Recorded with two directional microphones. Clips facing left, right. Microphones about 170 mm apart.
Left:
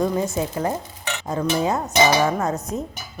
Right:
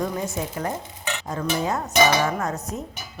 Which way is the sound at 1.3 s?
20° left (ahead or behind).